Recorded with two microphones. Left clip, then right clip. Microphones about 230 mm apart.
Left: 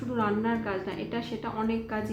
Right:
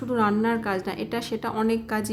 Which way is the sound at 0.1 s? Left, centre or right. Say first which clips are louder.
Right 5 dB; right.